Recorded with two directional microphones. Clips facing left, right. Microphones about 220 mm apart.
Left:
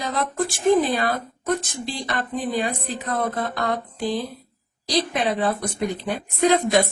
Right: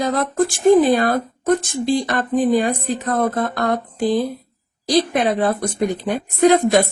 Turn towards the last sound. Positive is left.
turn(degrees=-50)  # may be behind; listen again after turning